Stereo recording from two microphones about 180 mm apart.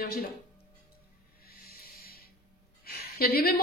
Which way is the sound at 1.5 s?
55° left (ahead or behind).